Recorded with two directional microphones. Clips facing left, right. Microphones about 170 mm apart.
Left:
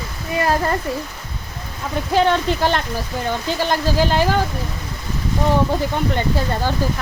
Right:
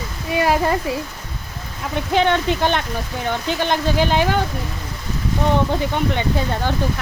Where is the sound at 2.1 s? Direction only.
5° left (ahead or behind).